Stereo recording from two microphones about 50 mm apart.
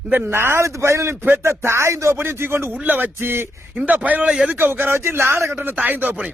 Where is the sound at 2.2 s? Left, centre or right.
Right.